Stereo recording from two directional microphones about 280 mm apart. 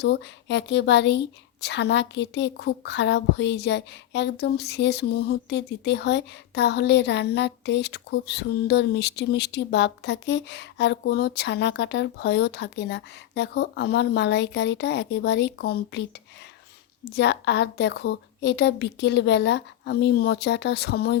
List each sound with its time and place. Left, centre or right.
0.0 s a woman's voice: left
17.1 s a woman's voice: left